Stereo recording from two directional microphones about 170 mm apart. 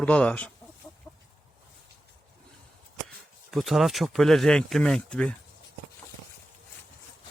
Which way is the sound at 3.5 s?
Centre (ahead or behind).